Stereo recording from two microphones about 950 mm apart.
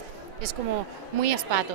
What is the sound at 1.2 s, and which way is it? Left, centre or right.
Speech, right.